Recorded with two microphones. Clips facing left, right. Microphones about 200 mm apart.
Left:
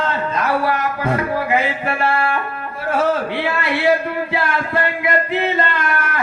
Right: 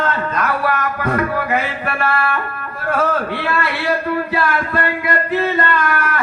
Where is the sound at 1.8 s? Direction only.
25° left (ahead or behind).